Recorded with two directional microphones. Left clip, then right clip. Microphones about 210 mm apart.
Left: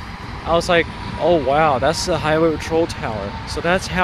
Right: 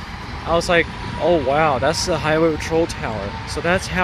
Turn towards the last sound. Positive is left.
turn(degrees=0)  # may be behind; listen again after turning